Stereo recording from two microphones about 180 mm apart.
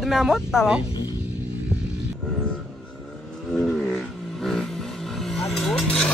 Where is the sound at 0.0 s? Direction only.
Centre (ahead or behind).